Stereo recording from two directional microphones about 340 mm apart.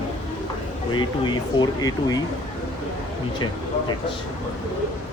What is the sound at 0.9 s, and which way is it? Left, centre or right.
Speech, centre.